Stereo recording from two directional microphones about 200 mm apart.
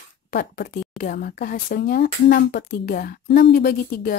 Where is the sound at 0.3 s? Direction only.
45° left (ahead or behind).